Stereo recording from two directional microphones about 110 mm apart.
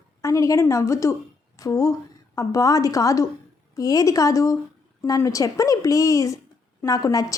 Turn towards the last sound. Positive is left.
turn(degrees=30)  # may be behind; listen again after turning